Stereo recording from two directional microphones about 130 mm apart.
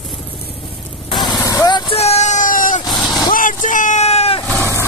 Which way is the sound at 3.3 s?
90° left.